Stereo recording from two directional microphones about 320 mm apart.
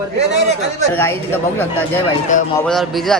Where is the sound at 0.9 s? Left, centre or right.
Centre.